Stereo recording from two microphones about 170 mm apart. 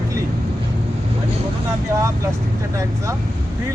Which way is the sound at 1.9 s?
20° right (ahead or behind).